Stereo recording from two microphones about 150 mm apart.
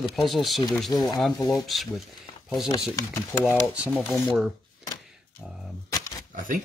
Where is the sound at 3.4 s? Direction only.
5° right (ahead or behind).